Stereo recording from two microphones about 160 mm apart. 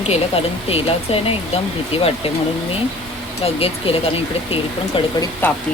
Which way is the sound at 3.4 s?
35° left (ahead or behind).